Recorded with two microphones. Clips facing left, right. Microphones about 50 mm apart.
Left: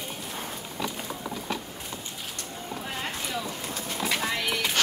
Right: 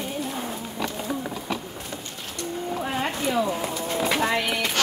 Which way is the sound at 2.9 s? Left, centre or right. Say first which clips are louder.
Right 7 dB; right.